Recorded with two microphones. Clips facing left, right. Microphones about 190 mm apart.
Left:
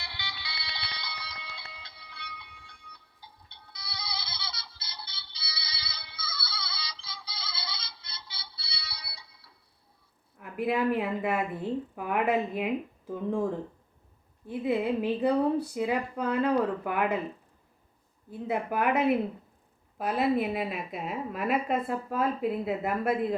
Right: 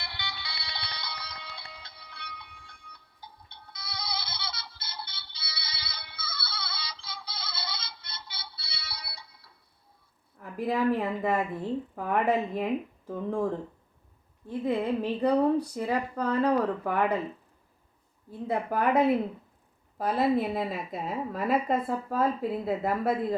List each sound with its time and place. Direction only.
0.0 s music: 50° right (ahead or behind)
10.4 s a woman's voice: centre (ahead or behind)
18.3 s a woman's voice: 5° left (ahead or behind)